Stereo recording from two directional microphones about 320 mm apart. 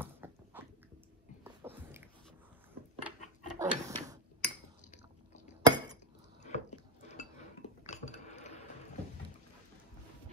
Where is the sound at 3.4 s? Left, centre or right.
Centre.